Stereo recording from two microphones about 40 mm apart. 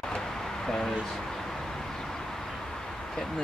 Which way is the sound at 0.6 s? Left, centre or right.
Centre.